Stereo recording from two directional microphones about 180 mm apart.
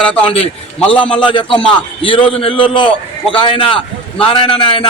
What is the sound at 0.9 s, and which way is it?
A man's voice, 30° left (ahead or behind).